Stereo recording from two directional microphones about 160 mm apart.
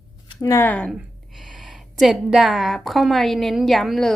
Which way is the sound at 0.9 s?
Centre (ahead or behind).